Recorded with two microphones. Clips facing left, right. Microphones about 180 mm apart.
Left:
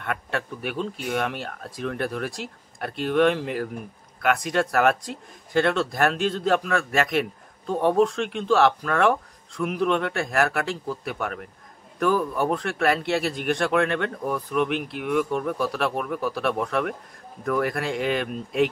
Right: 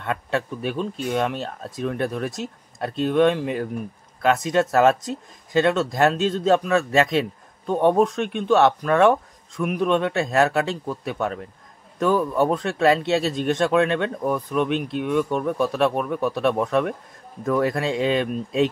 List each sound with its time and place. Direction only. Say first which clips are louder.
0.0 s speech: right 4 dB; 25° right (ahead or behind)